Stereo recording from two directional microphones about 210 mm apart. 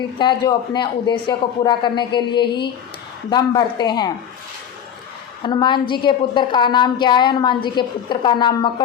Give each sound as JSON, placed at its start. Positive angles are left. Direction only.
{"t": 0.2, "sound": "a woman's voice", "side_deg": 20}
{"t": 5.4, "sound": "a woman's voice", "side_deg": 20}